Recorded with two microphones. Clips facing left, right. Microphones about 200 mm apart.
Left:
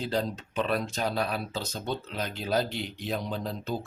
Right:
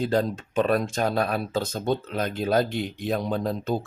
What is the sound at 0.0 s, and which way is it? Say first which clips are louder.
Speech: right 6 dB; 50° right (ahead or behind).